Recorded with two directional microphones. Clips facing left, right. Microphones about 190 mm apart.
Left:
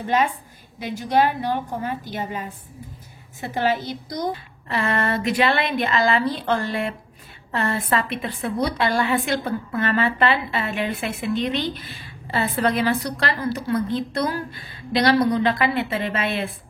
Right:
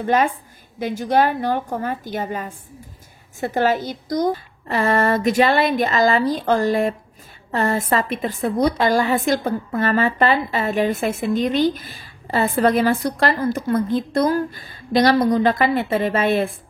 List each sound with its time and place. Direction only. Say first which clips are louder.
0.0 s a woman's voice: right 3 dB; 50° right (ahead or behind)